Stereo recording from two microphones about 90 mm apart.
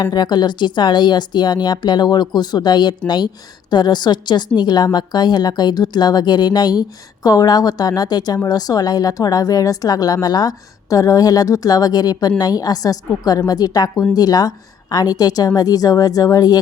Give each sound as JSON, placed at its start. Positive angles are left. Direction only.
{"t": 0.0, "sound": "a woman's voice", "side_deg": 55}